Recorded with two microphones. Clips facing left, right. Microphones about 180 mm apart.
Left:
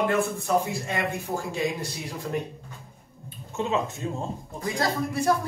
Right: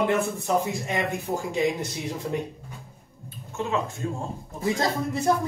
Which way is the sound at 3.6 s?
20° left (ahead or behind).